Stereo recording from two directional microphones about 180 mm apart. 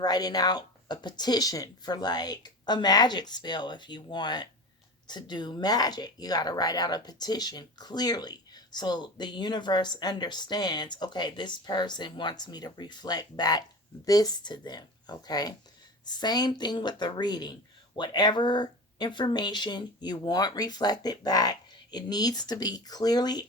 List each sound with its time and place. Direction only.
0.0 s speech: 20° left (ahead or behind)